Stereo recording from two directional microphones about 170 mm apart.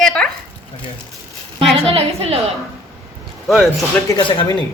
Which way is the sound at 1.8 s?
35° right (ahead or behind).